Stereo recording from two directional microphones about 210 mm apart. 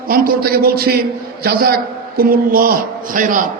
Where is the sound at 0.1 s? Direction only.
45° right (ahead or behind).